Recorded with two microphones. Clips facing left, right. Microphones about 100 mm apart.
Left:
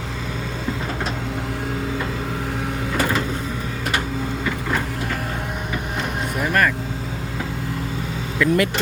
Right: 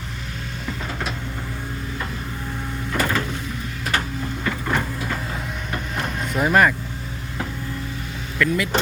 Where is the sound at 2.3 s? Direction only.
75° left (ahead or behind).